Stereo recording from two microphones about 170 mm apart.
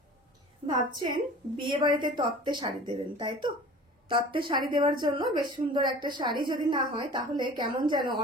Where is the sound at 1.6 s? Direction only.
30° right (ahead or behind).